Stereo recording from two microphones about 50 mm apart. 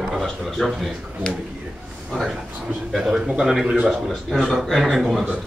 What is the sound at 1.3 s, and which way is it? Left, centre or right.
Speech, centre.